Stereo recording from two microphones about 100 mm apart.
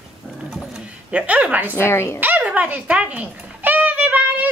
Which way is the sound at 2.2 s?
15° right (ahead or behind).